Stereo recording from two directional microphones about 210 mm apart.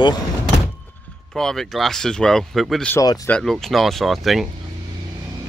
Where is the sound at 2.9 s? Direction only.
15° left (ahead or behind).